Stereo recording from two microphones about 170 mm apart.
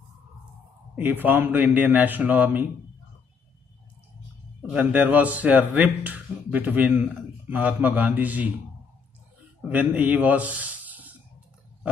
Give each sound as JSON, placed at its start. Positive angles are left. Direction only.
{"t": 0.9, "sound": "speech", "side_deg": -10}
{"t": 4.6, "sound": "speech", "side_deg": -5}
{"t": 9.7, "sound": "speech", "side_deg": -10}